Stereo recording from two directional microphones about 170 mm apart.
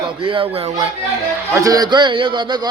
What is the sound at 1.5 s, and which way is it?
Speech, 20° right (ahead or behind).